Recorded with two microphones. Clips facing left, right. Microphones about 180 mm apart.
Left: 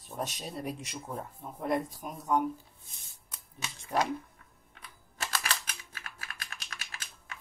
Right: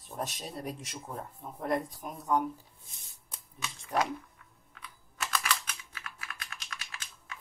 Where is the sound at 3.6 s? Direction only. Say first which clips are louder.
Even; 30° left (ahead or behind).